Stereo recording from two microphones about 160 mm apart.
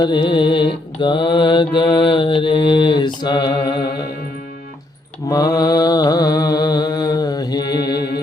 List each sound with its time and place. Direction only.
0.0 s mantra: 30° left (ahead or behind)
5.3 s mantra: 25° left (ahead or behind)